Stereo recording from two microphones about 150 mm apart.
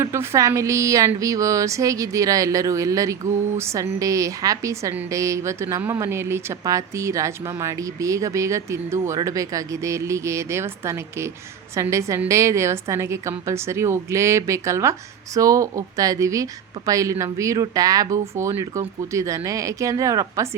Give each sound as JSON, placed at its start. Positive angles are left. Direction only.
{"t": 0.0, "sound": "a woman's voice", "side_deg": -20}